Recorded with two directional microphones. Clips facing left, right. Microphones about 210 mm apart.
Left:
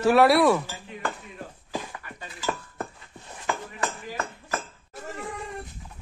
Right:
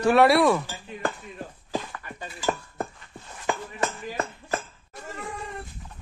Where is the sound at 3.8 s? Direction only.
25° right (ahead or behind).